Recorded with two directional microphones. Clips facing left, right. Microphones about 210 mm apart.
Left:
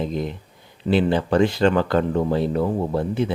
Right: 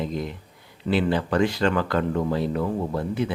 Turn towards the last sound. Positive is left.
turn(degrees=25)  # may be behind; listen again after turning